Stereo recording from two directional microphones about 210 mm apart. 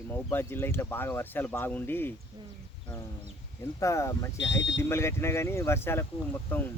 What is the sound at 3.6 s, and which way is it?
Speech, 15° left (ahead or behind).